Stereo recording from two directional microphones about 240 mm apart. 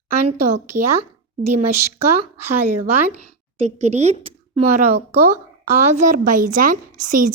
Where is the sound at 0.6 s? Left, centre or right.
Right.